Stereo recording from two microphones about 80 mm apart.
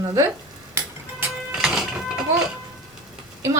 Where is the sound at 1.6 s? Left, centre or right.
Centre.